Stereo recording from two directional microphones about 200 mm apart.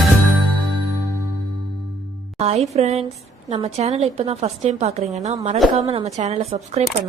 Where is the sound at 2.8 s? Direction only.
30° right (ahead or behind).